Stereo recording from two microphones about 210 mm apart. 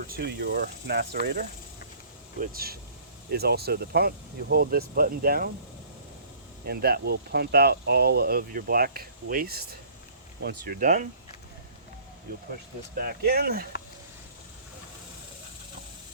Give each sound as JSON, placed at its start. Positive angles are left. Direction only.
{"t": 0.1, "sound": "speech", "side_deg": -50}
{"t": 6.7, "sound": "speech", "side_deg": -50}
{"t": 13.0, "sound": "speech", "side_deg": -45}